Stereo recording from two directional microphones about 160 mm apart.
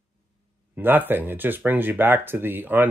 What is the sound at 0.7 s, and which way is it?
Speech, 10° right (ahead or behind).